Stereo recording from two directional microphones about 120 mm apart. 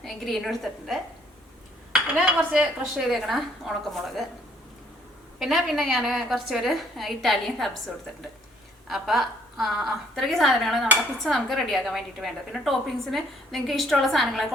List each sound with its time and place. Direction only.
0.0 s a woman's voice: centre (ahead or behind)
2.5 s a woman's voice: 5° right (ahead or behind)
5.4 s a woman's voice: centre (ahead or behind)
8.9 s a woman's voice: centre (ahead or behind)